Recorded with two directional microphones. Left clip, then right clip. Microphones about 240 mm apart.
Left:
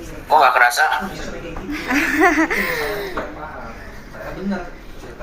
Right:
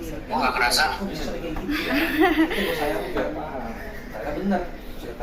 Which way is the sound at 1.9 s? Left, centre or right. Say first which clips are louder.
Left 6 dB; left.